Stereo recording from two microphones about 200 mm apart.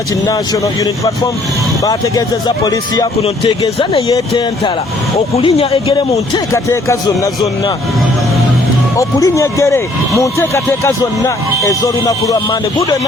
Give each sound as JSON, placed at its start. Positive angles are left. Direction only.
{"t": 0.3, "sound": "speech", "side_deg": 15}
{"t": 9.0, "sound": "speech", "side_deg": 15}